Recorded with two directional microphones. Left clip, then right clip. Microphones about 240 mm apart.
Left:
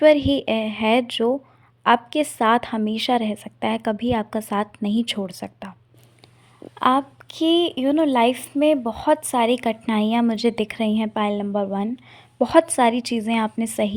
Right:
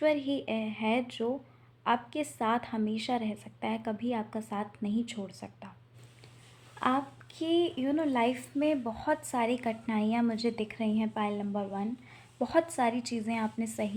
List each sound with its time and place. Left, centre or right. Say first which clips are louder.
0.0 s speech: left 13 dB; left
6.7 s speech: left 11 dB; left